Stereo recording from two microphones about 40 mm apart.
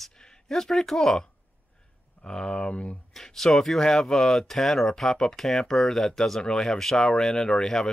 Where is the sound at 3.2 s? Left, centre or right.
Centre.